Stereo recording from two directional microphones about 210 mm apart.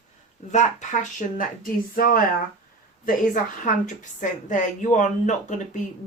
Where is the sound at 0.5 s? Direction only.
35° left (ahead or behind).